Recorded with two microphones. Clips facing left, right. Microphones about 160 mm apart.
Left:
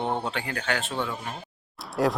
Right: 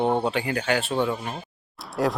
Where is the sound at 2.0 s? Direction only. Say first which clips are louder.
Even; centre (ahead or behind).